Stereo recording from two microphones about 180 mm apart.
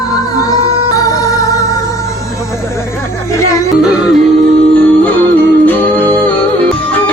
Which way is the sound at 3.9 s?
Centre (ahead or behind).